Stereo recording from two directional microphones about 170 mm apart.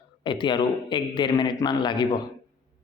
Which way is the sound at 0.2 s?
25° left (ahead or behind).